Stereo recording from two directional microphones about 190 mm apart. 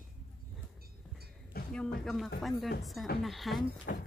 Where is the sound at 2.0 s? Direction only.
Centre (ahead or behind).